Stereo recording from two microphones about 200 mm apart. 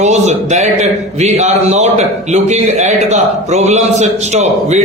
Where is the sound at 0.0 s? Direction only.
35° right (ahead or behind).